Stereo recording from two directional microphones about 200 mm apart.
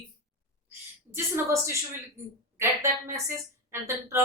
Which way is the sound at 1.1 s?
15° right (ahead or behind).